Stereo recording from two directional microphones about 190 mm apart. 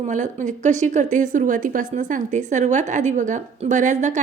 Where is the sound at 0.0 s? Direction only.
40° right (ahead or behind).